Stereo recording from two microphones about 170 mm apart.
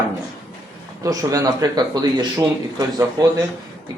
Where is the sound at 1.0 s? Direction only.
20° right (ahead or behind).